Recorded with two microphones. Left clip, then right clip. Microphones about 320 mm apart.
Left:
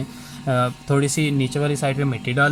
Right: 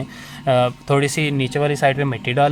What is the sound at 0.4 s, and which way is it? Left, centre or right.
Speech, right.